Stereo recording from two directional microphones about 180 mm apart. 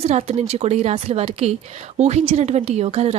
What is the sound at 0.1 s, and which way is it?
Speech, 35° right (ahead or behind).